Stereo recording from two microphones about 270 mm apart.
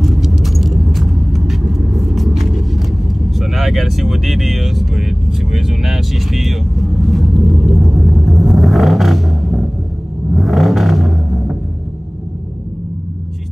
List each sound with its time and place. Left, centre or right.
0.0 s vehicle: centre